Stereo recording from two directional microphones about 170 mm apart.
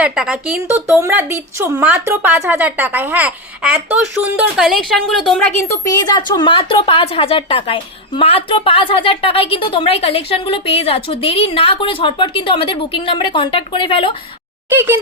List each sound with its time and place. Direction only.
0.0 s speech: 5° right (ahead or behind)
1.0 s speech: 15° right (ahead or behind); by 5.4 s centre (ahead or behind)
5.6 s a woman's voice: 20° left (ahead or behind)